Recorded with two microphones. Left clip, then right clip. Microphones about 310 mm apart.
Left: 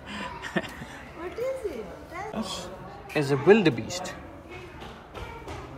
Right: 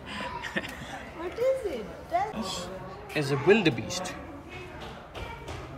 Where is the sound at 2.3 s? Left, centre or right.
Centre.